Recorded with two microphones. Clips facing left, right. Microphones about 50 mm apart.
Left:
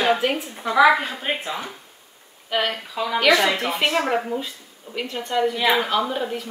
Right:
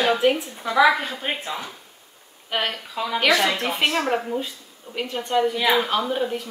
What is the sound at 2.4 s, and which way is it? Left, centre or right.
Speech, centre.